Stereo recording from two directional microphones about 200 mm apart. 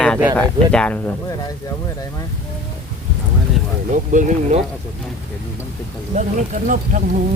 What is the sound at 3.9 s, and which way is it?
Speech, 40° right (ahead or behind).